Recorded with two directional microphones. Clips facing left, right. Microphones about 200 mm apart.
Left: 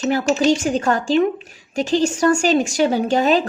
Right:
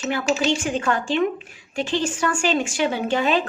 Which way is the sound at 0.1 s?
40° left (ahead or behind).